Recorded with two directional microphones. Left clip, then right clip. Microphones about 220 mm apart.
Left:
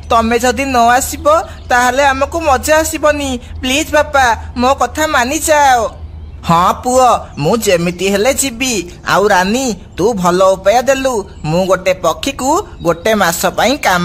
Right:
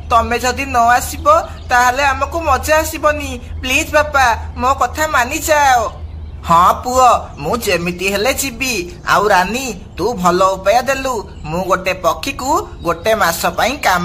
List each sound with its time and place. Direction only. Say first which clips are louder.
0.1 s a woman's voice: left 3 dB; 45° left (ahead or behind)